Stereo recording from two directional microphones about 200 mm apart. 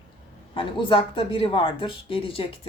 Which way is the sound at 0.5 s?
25° left (ahead or behind).